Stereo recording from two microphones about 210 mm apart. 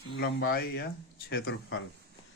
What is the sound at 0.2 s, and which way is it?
Speech, 50° left (ahead or behind).